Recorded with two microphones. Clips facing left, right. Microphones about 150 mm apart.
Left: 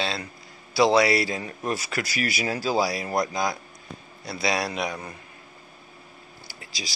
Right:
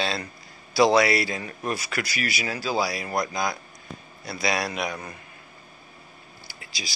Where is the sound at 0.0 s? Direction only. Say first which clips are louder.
Right 1 dB; 20° left (ahead or behind).